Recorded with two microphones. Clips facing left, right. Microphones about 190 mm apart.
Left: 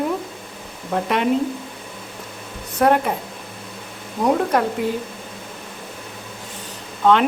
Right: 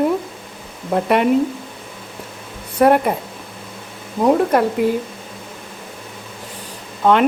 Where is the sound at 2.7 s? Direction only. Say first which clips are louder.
Right 4 dB; 10° right (ahead or behind).